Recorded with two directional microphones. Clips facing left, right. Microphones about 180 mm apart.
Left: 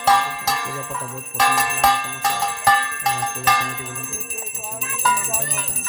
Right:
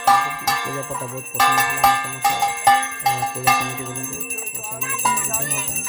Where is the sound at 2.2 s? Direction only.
20° right (ahead or behind).